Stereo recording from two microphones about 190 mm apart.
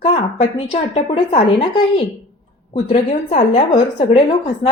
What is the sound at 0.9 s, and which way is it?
A woman's voice, 30° left (ahead or behind).